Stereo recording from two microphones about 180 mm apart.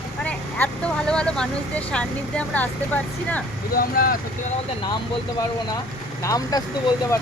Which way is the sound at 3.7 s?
55° left (ahead or behind).